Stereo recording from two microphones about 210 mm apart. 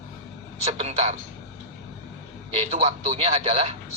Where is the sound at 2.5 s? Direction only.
30° right (ahead or behind).